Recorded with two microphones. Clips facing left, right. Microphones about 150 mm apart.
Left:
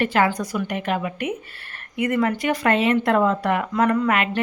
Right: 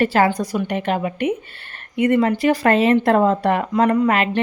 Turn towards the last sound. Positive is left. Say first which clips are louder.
# right 3 dB
turn(degrees=-20)  # may be behind; listen again after turning